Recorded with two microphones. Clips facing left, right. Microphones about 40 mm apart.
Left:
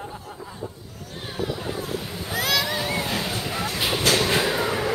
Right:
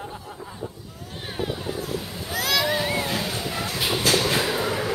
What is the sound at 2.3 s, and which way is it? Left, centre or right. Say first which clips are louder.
Vehicle: left 1 dB; centre.